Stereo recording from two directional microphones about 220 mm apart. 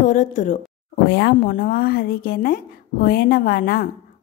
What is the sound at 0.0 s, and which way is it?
Speech, 35° left (ahead or behind).